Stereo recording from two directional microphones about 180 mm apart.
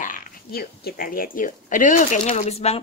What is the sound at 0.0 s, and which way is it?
Speech, 55° left (ahead or behind).